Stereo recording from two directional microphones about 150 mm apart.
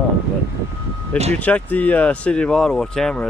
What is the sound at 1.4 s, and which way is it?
Speech, 10° left (ahead or behind).